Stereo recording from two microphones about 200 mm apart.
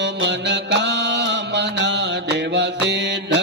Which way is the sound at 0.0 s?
60° right (ahead or behind).